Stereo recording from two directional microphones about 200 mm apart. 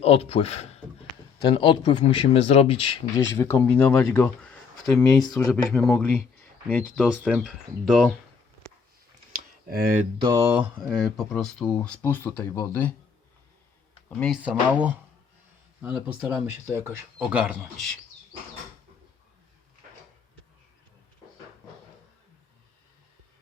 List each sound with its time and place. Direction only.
0.0 s speech: 30° left (ahead or behind)
3.3 s speech: 10° left (ahead or behind)
4.9 s speech: 20° left (ahead or behind)
5.7 s speech: 5° left (ahead or behind)
7.0 s speech: centre (ahead or behind)
9.3 s a sound: 50° right (ahead or behind)
10.2 s a sound: 25° right (ahead or behind)
10.4 s speech: 10° right (ahead or behind); by 12.9 s 10° left (ahead or behind)
14.2 s speech: 5° right (ahead or behind)